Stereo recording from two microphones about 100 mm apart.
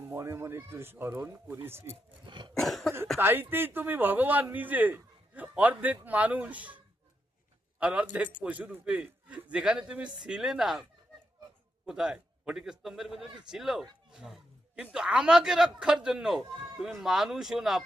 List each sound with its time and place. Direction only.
0.0 s speech: 25° right (ahead or behind)
2.2 s cough: 55° right (ahead or behind)
2.6 s speech: centre (ahead or behind)
3.2 s a man's voice: 20° right (ahead or behind); by 10.8 s 5° right (ahead or behind)
11.9 s speech: 5° right (ahead or behind)
14.1 s a sound: 5° right (ahead or behind)
14.9 s speech: 10° right (ahead or behind)